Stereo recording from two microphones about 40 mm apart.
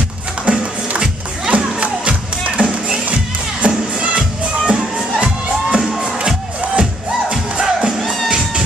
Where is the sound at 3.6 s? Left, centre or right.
Right.